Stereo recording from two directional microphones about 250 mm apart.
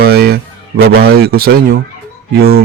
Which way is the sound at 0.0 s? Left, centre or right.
Right.